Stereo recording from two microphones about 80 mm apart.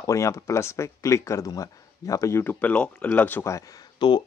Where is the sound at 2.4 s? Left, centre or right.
Left.